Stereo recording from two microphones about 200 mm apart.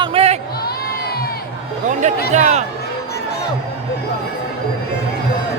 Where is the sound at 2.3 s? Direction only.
35° right (ahead or behind).